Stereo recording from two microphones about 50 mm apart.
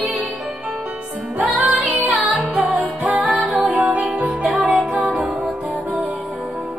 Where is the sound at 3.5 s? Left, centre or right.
Right.